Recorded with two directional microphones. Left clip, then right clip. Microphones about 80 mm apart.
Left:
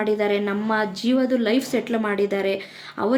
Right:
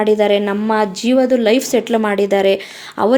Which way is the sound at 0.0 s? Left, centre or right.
Right.